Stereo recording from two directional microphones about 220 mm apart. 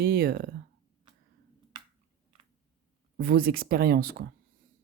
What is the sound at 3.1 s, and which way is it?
Speech, 45° right (ahead or behind).